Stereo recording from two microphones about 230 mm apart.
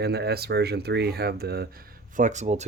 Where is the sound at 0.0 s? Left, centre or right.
Right.